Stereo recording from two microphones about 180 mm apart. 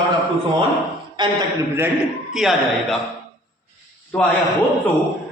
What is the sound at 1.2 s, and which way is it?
Speech, 25° right (ahead or behind).